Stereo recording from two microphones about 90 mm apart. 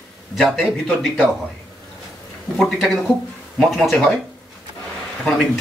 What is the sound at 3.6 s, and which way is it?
Speech, centre (ahead or behind).